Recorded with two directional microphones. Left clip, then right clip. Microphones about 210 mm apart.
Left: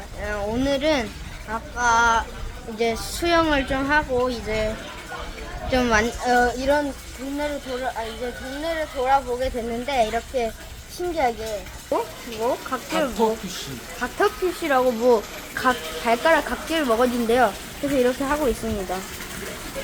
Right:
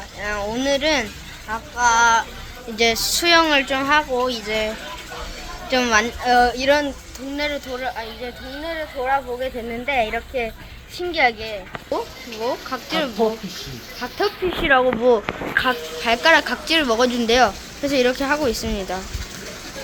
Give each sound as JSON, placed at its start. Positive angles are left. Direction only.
{"t": 0.2, "sound": "a sound", "side_deg": 10}
{"t": 0.5, "sound": "speech", "side_deg": 10}
{"t": 2.7, "sound": "speech", "side_deg": -5}
{"t": 5.7, "sound": "speech", "side_deg": 10}
{"t": 8.2, "sound": "speech", "side_deg": 10}
{"t": 14.8, "sound": "speech", "side_deg": 5}
{"t": 15.6, "sound": "speech", "side_deg": -5}